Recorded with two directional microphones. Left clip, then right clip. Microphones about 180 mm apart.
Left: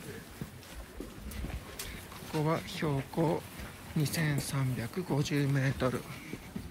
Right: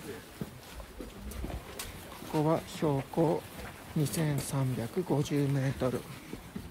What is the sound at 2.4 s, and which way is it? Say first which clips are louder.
Speech: right 3 dB; 15° right (ahead or behind).